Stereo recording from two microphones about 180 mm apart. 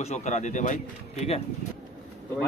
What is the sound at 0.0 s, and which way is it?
Speech, 40° left (ahead or behind).